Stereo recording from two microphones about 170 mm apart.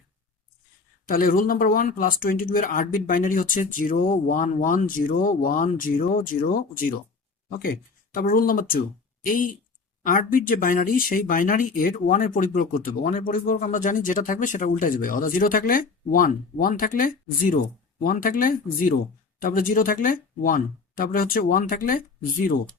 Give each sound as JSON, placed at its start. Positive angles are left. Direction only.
{"t": 1.0, "sound": "speech", "side_deg": 55}
{"t": 8.1, "sound": "speech", "side_deg": 55}